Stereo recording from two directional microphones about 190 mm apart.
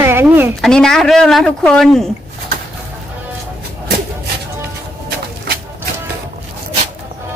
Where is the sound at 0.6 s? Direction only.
Centre (ahead or behind).